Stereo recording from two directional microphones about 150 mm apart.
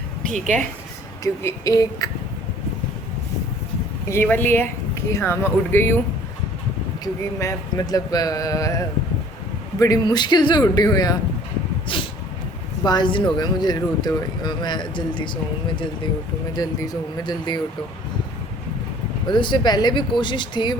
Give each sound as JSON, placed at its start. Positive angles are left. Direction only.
{"t": 0.3, "sound": "speech", "side_deg": -55}
{"t": 1.2, "sound": "speech", "side_deg": 20}
{"t": 4.1, "sound": "speech", "side_deg": 15}
{"t": 7.0, "sound": "speech", "side_deg": 20}
{"t": 19.3, "sound": "speech", "side_deg": 30}